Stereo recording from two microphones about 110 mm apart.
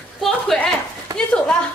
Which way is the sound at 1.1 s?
35° right (ahead or behind).